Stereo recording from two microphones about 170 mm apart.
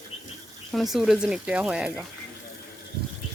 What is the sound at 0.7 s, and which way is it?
Speech, centre (ahead or behind).